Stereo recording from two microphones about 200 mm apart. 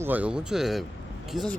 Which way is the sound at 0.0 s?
10° right (ahead or behind).